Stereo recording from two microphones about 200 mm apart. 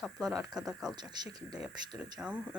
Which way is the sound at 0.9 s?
20° right (ahead or behind).